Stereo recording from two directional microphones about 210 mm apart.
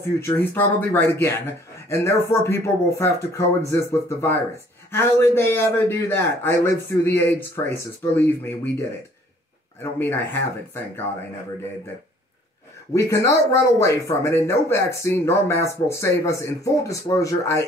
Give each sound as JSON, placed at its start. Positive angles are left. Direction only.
{"t": 0.0, "sound": "speech", "side_deg": 10}
{"t": 4.9, "sound": "speech", "side_deg": 10}
{"t": 9.8, "sound": "speech", "side_deg": 10}
{"t": 12.9, "sound": "speech", "side_deg": 15}